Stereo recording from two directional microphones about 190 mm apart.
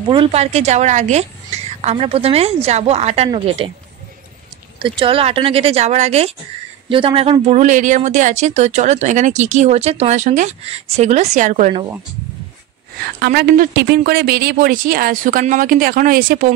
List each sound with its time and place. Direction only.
0.1 s a woman's voice: 30° right (ahead or behind)
4.8 s speech: 25° right (ahead or behind)
13.0 s speech: 55° right (ahead or behind)